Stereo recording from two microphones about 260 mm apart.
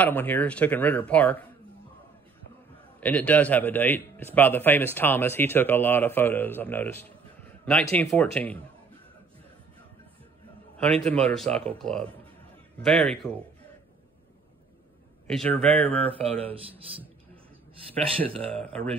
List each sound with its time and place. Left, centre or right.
0.0 s a man's voice: centre
3.0 s a man's voice: centre
11.1 s speech: centre
15.2 s a man's voice: centre
16.2 s speech: right
18.5 s speech: centre